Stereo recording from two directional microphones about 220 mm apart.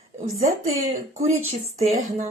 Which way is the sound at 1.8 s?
30° right (ahead or behind).